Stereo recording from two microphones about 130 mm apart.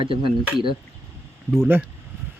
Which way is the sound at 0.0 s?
40° right (ahead or behind).